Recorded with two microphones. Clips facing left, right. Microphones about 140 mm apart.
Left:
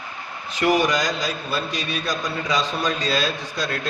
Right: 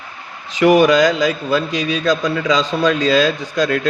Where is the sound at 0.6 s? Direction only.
90° right.